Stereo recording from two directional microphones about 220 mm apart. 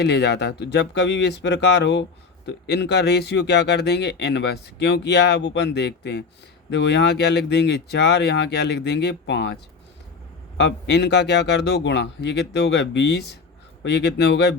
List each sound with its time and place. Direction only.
0.0 s speech: 50° left (ahead or behind)
10.6 s speech: 50° left (ahead or behind)